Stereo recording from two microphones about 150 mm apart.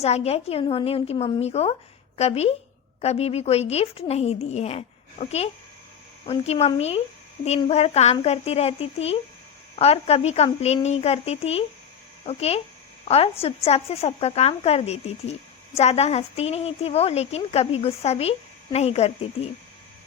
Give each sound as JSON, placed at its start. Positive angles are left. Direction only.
{"t": 0.0, "sound": "a woman's voice", "side_deg": 45}